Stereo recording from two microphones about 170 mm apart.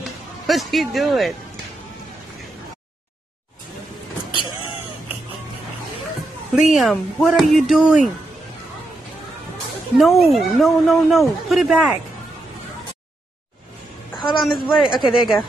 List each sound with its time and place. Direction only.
0.5 s speech: centre (ahead or behind)
6.5 s speech: centre (ahead or behind)
9.9 s speech: centre (ahead or behind)
14.4 s speech: centre (ahead or behind)